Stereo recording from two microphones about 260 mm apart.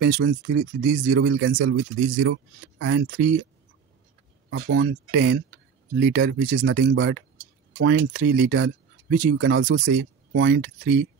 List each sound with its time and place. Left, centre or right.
0.0 s speech: right
4.5 s speech: right